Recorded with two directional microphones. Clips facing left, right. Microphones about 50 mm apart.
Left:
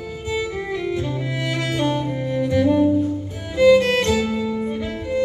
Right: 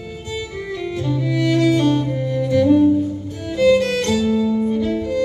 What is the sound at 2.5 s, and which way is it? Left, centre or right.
Music, centre.